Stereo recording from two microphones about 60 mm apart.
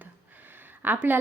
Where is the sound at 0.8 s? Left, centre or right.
Right.